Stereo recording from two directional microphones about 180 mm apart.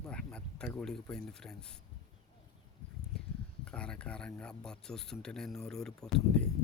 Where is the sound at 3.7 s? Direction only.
5° left (ahead or behind).